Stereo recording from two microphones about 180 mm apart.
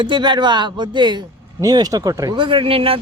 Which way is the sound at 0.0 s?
25° right (ahead or behind).